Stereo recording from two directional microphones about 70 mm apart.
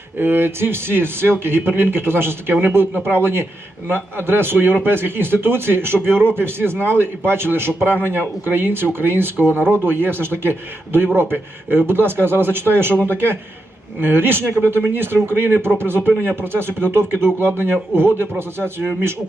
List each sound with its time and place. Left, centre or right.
0.2 s speech: right